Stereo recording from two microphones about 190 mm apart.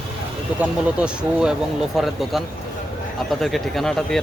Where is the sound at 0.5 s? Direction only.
5° right (ahead or behind).